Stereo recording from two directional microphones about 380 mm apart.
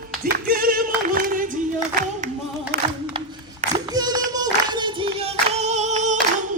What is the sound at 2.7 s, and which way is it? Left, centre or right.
Singing, right.